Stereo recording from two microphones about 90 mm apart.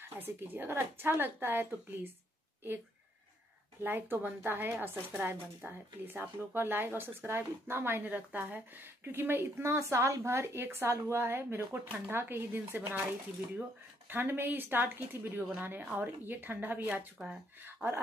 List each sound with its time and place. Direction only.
0.0 s speech: 20° right (ahead or behind)
3.8 s speech: 20° right (ahead or behind)